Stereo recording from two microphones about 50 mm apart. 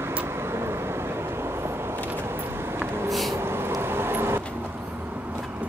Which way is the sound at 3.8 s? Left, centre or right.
Right.